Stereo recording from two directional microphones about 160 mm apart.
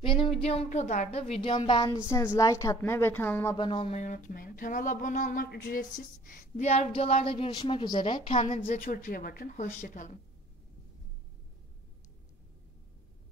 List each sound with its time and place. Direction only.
0.0 s a sound: 30° left (ahead or behind)
0.5 s a woman's voice: 45° left (ahead or behind)
2.0 s a woman's voice: 20° left (ahead or behind)
3.5 s a woman's voice: 30° left (ahead or behind)
3.9 s a woman's voice: 50° left (ahead or behind)
8.5 s a woman's voice: 60° left (ahead or behind)